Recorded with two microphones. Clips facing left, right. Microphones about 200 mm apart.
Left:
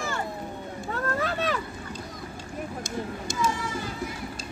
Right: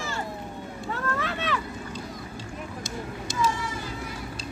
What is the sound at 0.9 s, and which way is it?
Vehicle, 40° left (ahead or behind).